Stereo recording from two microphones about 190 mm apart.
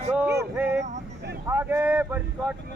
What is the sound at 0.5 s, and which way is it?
Music, 10° right (ahead or behind).